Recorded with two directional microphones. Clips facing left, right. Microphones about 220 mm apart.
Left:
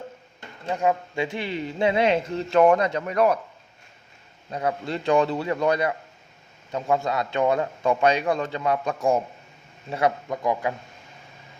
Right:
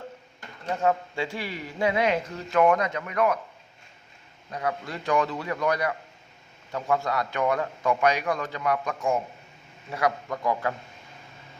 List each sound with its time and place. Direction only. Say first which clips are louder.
0.7 s speech: left 1 dB; 15° left (ahead or behind); by 3.3 s 35° left (ahead or behind)
4.5 s speech: left 4 dB; 25° left (ahead or behind)